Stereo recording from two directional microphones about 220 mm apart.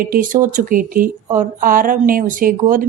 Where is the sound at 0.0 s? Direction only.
40° right (ahead or behind).